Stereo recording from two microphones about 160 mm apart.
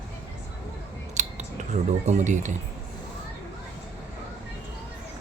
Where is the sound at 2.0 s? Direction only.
50° right (ahead or behind).